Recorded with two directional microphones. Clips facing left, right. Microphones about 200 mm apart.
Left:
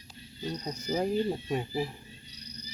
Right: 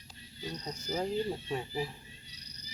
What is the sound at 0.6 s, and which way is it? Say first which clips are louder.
Speech: left 4 dB; 15° left (ahead or behind).